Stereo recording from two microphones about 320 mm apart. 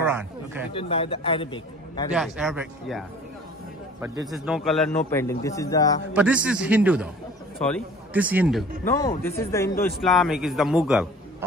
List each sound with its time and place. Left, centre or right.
0.0 s a sound: centre
0.7 s a man's voice: centre
2.1 s a man's voice: centre
6.1 s a man's voice: centre
8.8 s a man's voice: centre